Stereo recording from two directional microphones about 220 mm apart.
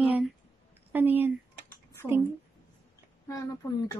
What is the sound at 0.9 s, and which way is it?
Speech, 10° right (ahead or behind).